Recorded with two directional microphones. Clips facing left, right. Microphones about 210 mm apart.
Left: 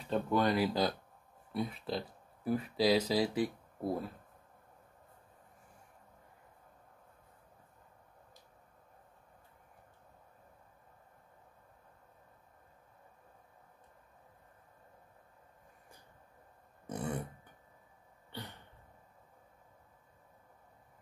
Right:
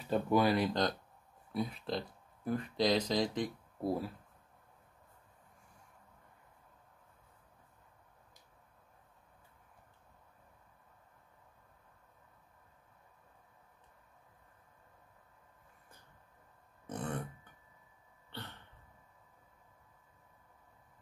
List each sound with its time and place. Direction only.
0.1 s speech: 5° right (ahead or behind)
0.6 s speech: 5° left (ahead or behind)
16.9 s burping: 10° left (ahead or behind)
18.3 s a sound: 15° left (ahead or behind)